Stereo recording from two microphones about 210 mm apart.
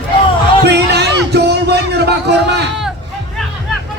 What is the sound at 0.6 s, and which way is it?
Music, 55° right (ahead or behind).